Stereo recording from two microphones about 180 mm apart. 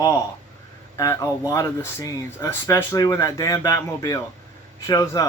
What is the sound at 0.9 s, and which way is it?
Speech, 15° left (ahead or behind).